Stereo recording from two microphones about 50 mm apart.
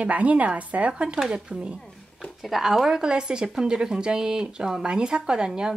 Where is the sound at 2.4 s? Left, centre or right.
Centre.